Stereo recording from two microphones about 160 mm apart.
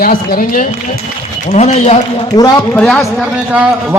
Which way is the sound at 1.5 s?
45° left (ahead or behind).